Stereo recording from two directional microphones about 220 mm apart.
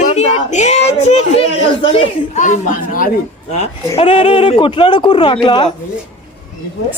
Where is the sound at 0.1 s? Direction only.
30° left (ahead or behind).